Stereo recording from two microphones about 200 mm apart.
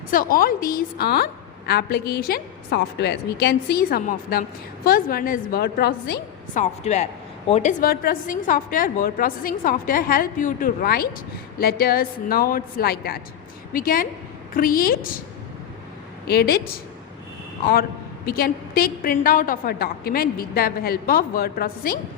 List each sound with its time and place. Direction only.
0.1 s a woman's voice: 45° left (ahead or behind)
6.6 s a woman's voice: 35° left (ahead or behind)
16.2 s a woman's voice: 50° left (ahead or behind)
18.3 s a woman's voice: 50° left (ahead or behind)